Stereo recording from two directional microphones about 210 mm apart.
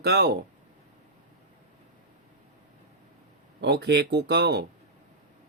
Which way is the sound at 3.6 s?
55° right (ahead or behind).